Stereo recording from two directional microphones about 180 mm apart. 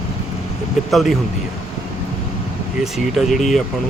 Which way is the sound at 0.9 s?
Centre (ahead or behind).